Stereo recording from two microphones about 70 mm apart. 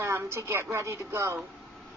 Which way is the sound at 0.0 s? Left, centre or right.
Right.